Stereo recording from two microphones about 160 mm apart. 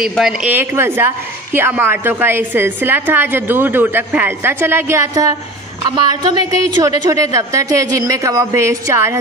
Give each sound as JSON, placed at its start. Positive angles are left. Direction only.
{"t": 0.0, "sound": "a woman's voice", "side_deg": -5}